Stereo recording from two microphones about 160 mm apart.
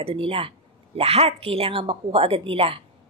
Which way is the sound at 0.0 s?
35° right (ahead or behind).